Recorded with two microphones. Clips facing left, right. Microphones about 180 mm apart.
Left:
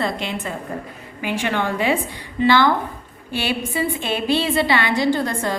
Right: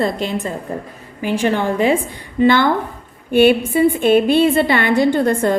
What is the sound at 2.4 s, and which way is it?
A woman's voice, 50° right (ahead or behind).